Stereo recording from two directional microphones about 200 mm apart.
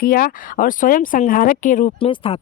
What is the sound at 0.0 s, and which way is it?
Speech, 45° left (ahead or behind).